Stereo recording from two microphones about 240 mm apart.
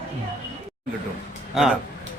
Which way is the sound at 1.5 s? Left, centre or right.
Centre.